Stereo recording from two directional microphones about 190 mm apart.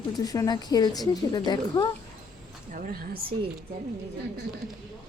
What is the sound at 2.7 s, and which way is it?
Speech, 45° right (ahead or behind).